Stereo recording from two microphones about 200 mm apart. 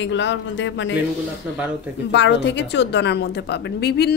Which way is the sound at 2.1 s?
65° left (ahead or behind).